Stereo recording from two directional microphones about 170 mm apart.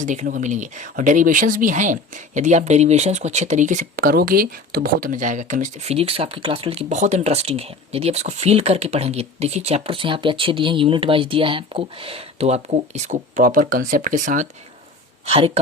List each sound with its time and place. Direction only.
0.0 s speech: 45° right (ahead or behind)
15.3 s speech: 35° right (ahead or behind)